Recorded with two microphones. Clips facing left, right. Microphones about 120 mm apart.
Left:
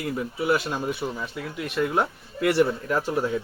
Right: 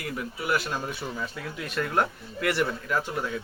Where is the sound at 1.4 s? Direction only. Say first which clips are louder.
Left 8 dB; 10° left (ahead or behind).